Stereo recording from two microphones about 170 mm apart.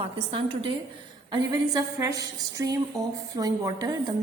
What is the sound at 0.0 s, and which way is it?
Speech, 30° right (ahead or behind).